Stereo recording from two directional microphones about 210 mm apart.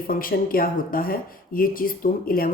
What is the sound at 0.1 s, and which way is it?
Speech, 45° left (ahead or behind).